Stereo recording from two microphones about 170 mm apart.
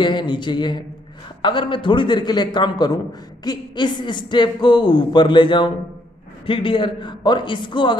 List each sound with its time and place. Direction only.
0.0 s a man's voice: 25° left (ahead or behind)